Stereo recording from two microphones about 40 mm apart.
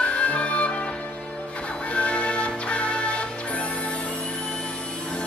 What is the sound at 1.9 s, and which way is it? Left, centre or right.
Music, left.